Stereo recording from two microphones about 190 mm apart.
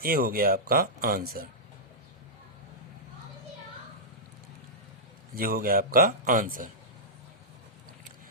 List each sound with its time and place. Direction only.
0.0 s speech: 50° right (ahead or behind)
5.3 s speech: 50° right (ahead or behind)